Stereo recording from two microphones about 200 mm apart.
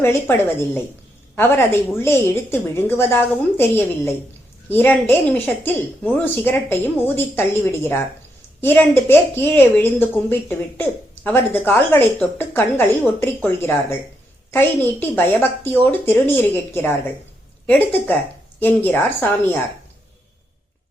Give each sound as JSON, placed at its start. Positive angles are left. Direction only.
{"t": 0.0, "sound": "a woman's voice", "side_deg": 10}